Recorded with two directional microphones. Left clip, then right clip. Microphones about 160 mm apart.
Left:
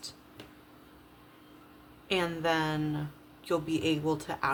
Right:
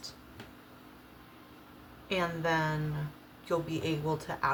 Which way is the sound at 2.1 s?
55° left (ahead or behind).